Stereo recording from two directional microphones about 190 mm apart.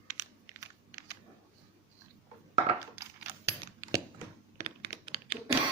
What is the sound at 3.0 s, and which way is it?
Keys jangling, 10° right (ahead or behind).